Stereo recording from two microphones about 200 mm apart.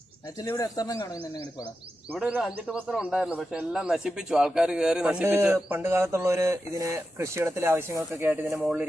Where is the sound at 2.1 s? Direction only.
5° right (ahead or behind).